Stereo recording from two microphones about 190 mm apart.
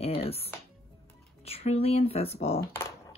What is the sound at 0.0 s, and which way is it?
Music, 30° left (ahead or behind).